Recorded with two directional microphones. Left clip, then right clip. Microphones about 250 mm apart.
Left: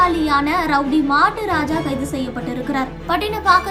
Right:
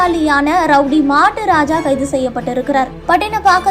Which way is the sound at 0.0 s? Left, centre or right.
Centre.